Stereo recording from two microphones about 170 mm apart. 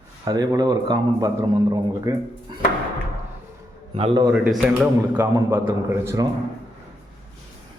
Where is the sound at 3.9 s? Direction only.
30° right (ahead or behind).